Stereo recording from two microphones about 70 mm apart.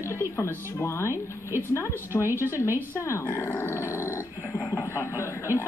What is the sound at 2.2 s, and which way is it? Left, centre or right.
Speech, right.